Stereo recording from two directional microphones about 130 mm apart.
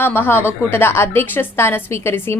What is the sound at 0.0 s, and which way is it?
A woman's voice, 15° left (ahead or behind).